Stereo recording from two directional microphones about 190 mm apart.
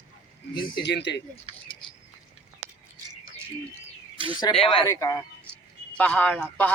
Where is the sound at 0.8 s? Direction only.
65° left (ahead or behind).